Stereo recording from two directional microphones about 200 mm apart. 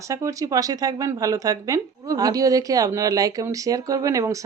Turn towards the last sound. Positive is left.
turn(degrees=-15)  # may be behind; listen again after turning